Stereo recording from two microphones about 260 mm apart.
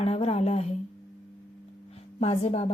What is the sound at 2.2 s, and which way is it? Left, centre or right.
Speech, left.